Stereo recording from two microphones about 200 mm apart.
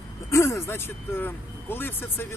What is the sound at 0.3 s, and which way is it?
Speech, 15° left (ahead or behind).